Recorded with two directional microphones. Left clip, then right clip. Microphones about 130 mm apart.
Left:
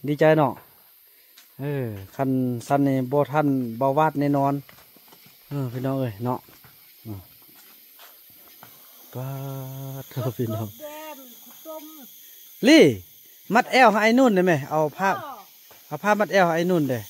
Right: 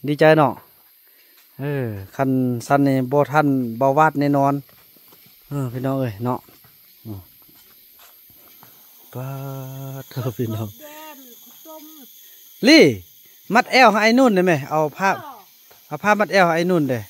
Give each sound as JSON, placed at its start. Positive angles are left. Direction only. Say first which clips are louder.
{"t": 0.0, "sound": "speech", "louder": "right 4 dB", "side_deg": -45}
{"t": 1.6, "sound": "speech", "louder": "right 4 dB", "side_deg": -40}
{"t": 9.1, "sound": "speech", "louder": "right 3 dB", "side_deg": -35}
{"t": 10.8, "sound": "a sound", "louder": "left 2 dB", "side_deg": 30}
{"t": 12.5, "sound": "speech", "louder": "right 3 dB", "side_deg": -30}